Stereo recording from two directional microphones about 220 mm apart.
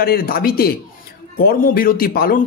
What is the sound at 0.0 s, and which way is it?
Speech, 45° left (ahead or behind).